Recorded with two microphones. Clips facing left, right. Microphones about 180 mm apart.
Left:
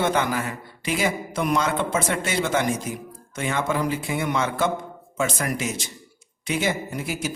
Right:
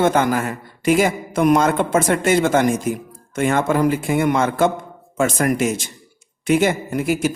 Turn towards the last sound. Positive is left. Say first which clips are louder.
# right 9 dB
turn(degrees=-55)  # may be behind; listen again after turning